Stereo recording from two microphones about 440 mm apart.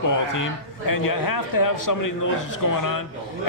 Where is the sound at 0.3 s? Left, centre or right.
Left.